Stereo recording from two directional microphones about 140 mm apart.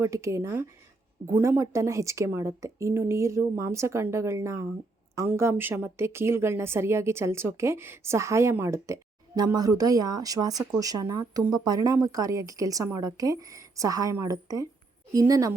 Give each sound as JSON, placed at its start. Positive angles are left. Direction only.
{"t": 0.0, "sound": "a woman's voice", "side_deg": -20}